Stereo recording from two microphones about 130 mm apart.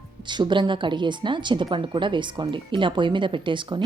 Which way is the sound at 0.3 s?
35° right (ahead or behind).